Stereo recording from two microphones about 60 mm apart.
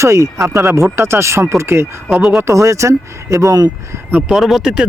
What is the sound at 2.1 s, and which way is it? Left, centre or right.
Speech, centre.